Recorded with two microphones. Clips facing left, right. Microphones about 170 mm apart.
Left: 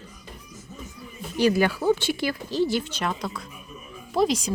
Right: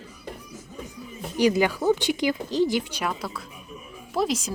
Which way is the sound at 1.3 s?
15° right (ahead or behind).